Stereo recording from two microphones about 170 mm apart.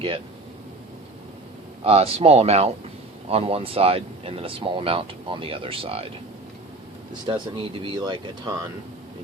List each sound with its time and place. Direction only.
1.8 s speech: 35° right (ahead or behind)
7.1 s speech: 25° right (ahead or behind)